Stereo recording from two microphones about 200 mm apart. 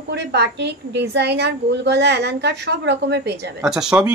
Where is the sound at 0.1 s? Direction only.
55° right (ahead or behind).